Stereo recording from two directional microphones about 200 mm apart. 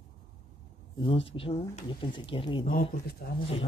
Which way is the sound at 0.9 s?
25° left (ahead or behind).